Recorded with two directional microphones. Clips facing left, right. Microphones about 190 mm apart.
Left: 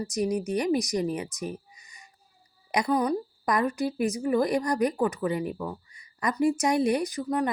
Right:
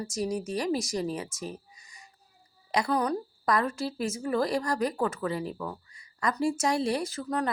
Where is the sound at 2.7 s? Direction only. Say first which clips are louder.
Left 2 dB; 15° left (ahead or behind).